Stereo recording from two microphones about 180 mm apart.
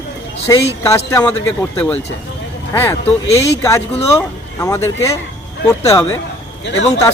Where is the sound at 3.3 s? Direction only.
15° left (ahead or behind).